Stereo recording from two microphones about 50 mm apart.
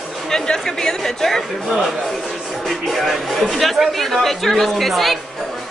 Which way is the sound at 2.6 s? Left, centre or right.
Centre.